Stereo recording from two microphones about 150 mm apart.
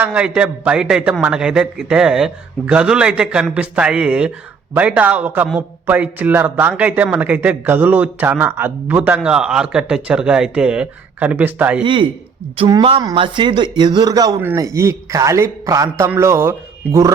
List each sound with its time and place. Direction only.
0.0 s a man's voice: 10° right (ahead or behind)
12.6 s a man's voice: 30° right (ahead or behind)